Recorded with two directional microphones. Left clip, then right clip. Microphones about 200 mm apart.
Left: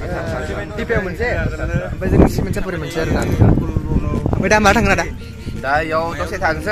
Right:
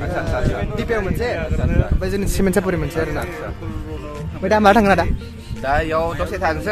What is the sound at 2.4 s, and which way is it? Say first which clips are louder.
Speech: right 6 dB; 50° right (ahead or behind).